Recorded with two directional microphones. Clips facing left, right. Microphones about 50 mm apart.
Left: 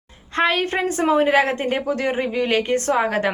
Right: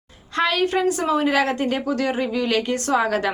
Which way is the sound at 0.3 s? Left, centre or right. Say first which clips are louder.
Even; left.